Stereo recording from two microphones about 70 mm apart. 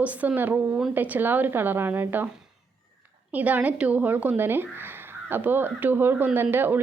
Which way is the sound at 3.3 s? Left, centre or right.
Right.